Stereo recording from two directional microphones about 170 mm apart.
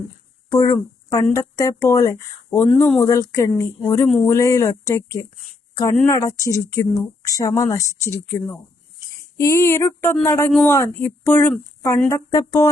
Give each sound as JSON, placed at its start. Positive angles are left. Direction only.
{"t": 0.5, "sound": "speech", "side_deg": 20}
{"t": 2.6, "sound": "speech", "side_deg": 5}
{"t": 3.0, "sound": "a woman's voice", "side_deg": 20}